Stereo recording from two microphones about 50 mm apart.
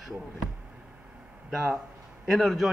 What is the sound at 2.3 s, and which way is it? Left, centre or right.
Speech, centre.